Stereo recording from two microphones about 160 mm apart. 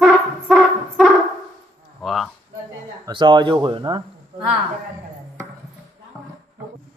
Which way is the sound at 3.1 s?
30° right (ahead or behind).